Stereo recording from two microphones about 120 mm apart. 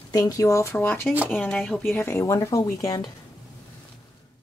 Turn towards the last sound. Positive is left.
turn(degrees=30)  # may be behind; listen again after turning